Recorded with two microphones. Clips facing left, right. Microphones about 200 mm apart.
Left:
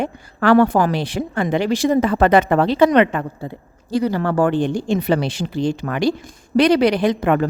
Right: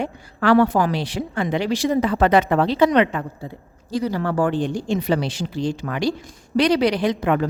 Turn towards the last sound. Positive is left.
turn(degrees=50)  # may be behind; listen again after turning